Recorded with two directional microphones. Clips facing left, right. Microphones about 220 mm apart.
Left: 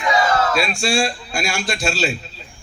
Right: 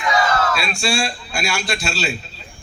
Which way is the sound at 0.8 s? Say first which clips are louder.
Left 2 dB; 50° left (ahead or behind).